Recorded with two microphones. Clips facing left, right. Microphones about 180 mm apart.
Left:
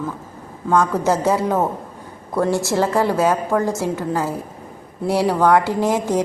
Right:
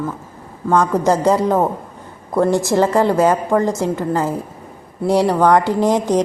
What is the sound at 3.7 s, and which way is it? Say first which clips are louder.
Speech: right 3 dB; 15° right (ahead or behind).